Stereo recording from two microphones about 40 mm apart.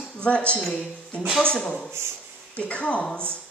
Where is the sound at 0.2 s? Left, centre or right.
Left.